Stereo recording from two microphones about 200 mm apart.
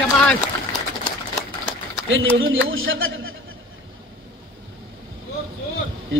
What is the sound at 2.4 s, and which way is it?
Speech, 75° right (ahead or behind).